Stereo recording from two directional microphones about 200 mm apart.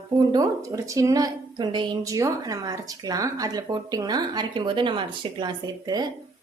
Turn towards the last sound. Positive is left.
turn(degrees=-20)  # may be behind; listen again after turning